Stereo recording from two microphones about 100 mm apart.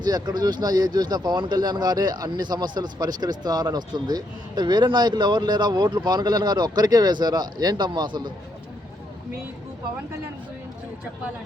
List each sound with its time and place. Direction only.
0.0 s speech: 45° right (ahead or behind)